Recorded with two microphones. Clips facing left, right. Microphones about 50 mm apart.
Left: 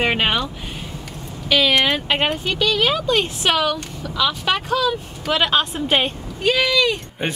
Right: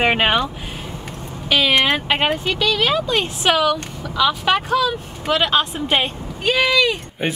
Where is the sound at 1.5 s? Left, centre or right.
Centre.